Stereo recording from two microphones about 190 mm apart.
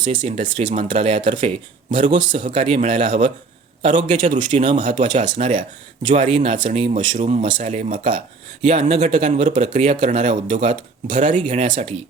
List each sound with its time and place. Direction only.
0.0 s speech: 25° right (ahead or behind)
4.1 s speech: 40° right (ahead or behind)
5.2 s speech: 25° right (ahead or behind)
11.7 s speech: 25° right (ahead or behind)